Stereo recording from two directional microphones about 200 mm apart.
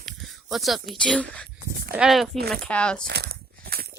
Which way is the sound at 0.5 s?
Centre (ahead or behind).